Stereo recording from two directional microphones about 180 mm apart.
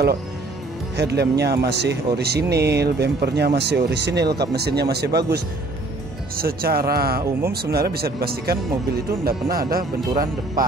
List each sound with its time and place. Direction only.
0.9 s a man's voice: 65° right (ahead or behind)